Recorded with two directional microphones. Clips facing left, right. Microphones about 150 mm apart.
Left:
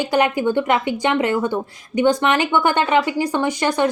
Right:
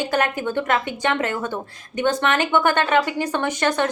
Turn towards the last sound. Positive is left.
turn(degrees=10)  # may be behind; listen again after turning